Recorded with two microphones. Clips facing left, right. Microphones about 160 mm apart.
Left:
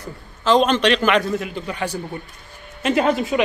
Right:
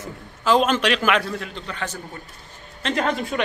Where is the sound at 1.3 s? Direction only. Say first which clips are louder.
Left 6 dB; 10° left (ahead or behind).